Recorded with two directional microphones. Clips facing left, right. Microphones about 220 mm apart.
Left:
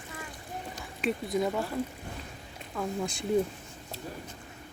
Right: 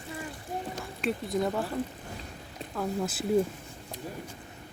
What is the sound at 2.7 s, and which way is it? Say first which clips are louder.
Speech: right 1 dB; centre (ahead or behind).